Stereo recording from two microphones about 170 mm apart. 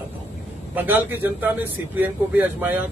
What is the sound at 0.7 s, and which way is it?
Speech, 10° right (ahead or behind).